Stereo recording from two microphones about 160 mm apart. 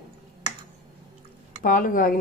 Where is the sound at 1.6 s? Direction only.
60° left (ahead or behind).